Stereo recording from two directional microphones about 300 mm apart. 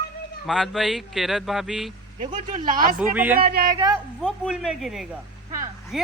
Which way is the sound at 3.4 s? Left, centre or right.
Right.